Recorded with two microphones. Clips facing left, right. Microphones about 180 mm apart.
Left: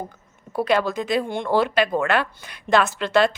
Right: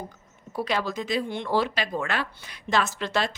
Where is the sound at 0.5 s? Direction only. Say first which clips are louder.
Left 7 dB; 55° left (ahead or behind).